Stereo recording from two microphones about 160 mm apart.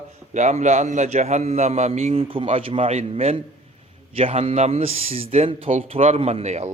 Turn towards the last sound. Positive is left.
turn(degrees=-45)  # may be behind; listen again after turning